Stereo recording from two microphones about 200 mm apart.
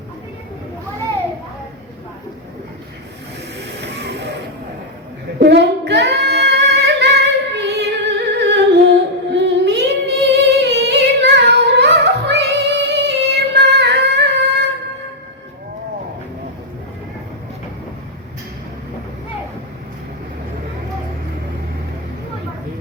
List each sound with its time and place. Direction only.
3.8 s music: 60° right (ahead or behind)
5.4 s singing: 55° right (ahead or behind)
8.4 s humming: 55° right (ahead or behind)